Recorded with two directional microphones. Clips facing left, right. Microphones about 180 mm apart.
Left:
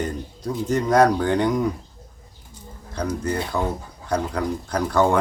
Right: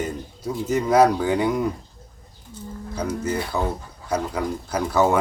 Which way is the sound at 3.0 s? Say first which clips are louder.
Left 1 dB; 5° right (ahead or behind).